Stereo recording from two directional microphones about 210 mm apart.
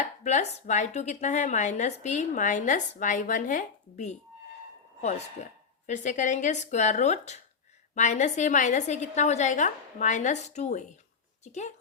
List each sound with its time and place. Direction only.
0.0 s speech: 35° left (ahead or behind)
5.8 s speech: 35° left (ahead or behind)